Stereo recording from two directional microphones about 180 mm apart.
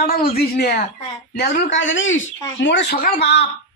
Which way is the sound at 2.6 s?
75° left (ahead or behind).